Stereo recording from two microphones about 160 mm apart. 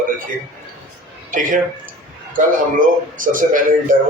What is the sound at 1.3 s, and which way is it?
Speech, 55° right (ahead or behind).